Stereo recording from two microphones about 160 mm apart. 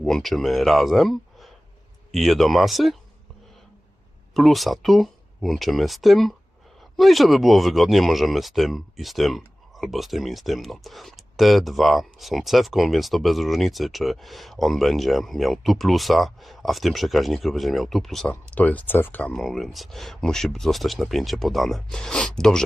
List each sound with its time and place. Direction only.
0.0 s speech: centre (ahead or behind)
4.4 s speech: centre (ahead or behind)